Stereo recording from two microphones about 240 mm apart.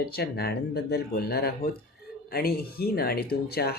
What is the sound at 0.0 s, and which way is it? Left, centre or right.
Speech, left.